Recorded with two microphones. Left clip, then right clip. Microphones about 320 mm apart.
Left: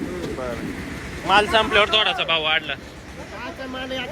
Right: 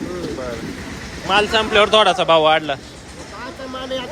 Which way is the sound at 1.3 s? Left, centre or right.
Centre.